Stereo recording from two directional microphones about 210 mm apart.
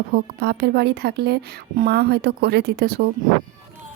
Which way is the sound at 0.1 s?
50° right (ahead or behind).